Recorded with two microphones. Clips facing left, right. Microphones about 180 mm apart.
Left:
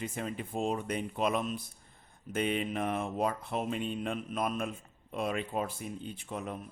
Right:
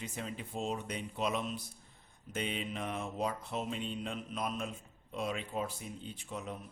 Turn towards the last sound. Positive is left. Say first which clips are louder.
# left 4 dB
turn(degrees=55)  # may be behind; listen again after turning